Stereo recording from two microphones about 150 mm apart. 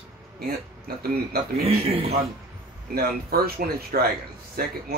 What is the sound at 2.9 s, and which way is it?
A man's voice, 90° right.